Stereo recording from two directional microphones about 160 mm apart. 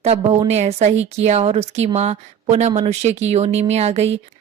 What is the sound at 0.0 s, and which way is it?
Speech, 40° right (ahead or behind).